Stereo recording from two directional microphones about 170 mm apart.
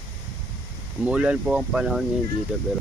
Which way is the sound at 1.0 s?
5° right (ahead or behind).